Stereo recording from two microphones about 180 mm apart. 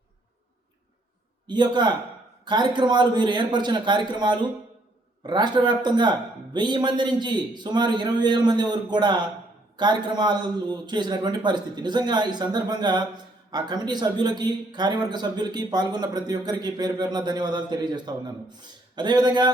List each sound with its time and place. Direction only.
1.5 s speech: 25° right (ahead or behind)